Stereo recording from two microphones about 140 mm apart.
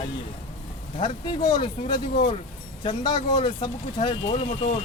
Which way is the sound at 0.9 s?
35° left (ahead or behind).